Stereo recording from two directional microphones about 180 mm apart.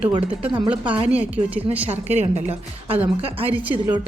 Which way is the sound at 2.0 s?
35° right (ahead or behind).